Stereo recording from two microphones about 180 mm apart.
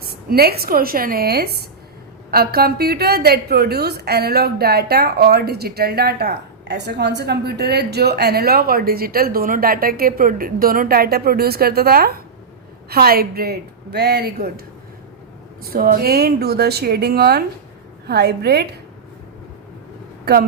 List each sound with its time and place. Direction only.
0.1 s a woman's voice: 60° right (ahead or behind)
15.6 s a woman's voice: 55° right (ahead or behind)